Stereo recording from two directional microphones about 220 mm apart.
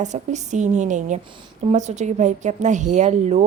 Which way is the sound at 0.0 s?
35° right (ahead or behind).